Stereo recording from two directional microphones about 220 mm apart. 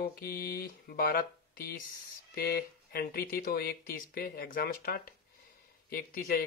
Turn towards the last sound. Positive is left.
turn(degrees=40)  # may be behind; listen again after turning